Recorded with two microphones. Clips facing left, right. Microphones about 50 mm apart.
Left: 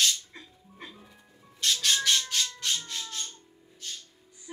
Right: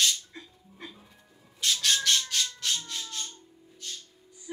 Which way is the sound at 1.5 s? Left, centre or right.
Centre.